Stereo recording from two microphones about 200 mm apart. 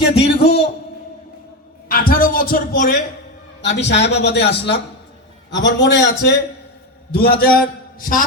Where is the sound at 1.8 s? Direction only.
45° left (ahead or behind).